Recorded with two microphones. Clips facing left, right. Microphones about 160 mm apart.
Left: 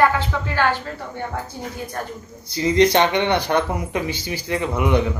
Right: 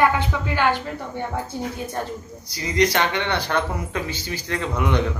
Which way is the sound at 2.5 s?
25° left (ahead or behind).